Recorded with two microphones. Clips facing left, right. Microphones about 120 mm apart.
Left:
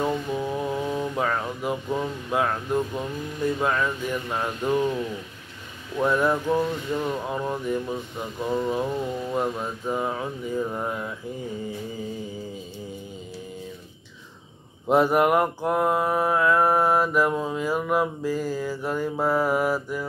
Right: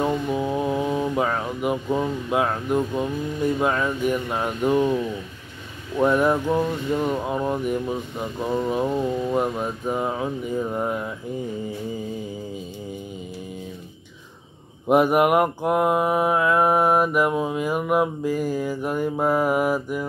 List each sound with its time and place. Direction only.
0.0 s speech: 15° right (ahead or behind)
3.5 s mantra: 15° right (ahead or behind)
5.9 s mantra: 15° right (ahead or behind)
8.5 s mantra: 5° right (ahead or behind)
8.7 s mantra: 15° right (ahead or behind)
14.9 s mantra: 15° right (ahead or behind)